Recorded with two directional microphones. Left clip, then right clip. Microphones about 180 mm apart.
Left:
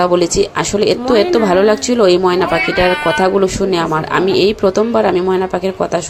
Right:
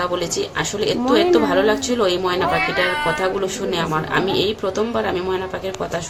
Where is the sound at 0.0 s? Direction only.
35° left (ahead or behind).